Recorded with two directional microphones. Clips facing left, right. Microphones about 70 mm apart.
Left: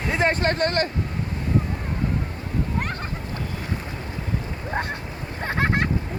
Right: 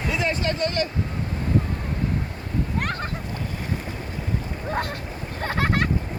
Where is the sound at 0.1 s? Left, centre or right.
Left.